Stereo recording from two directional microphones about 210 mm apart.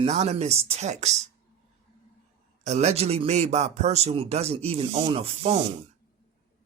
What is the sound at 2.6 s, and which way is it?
A man's voice, 30° right (ahead or behind).